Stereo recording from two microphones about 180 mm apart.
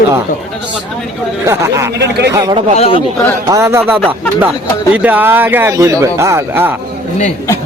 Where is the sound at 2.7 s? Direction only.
35° left (ahead or behind).